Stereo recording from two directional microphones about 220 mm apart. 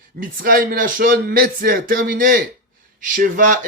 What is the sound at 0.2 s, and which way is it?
Speech, 40° right (ahead or behind).